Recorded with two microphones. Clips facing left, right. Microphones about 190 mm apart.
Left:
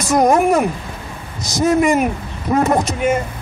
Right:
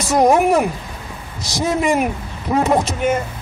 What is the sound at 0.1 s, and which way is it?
Speech, 5° right (ahead or behind).